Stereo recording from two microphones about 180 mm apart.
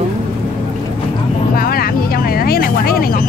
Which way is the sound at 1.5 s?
55° left (ahead or behind).